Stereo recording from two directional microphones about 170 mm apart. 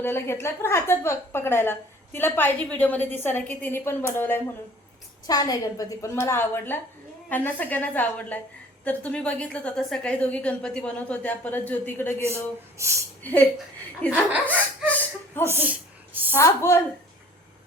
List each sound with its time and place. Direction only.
0.0 s a woman's voice: 15° left (ahead or behind)
5.2 s a woman's voice: 20° left (ahead or behind)
12.8 s speech: 15° right (ahead or behind)
13.2 s a woman's voice: 10° left (ahead or behind)
15.4 s a woman's voice: 10° right (ahead or behind)
16.3 s a woman's voice: 15° left (ahead or behind)